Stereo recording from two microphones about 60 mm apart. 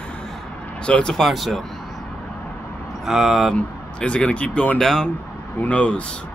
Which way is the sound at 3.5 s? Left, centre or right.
Centre.